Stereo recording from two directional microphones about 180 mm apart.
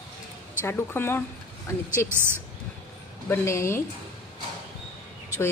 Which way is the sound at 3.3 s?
15° left (ahead or behind).